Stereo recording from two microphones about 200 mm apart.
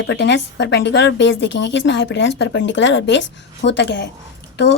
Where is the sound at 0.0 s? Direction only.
60° left (ahead or behind).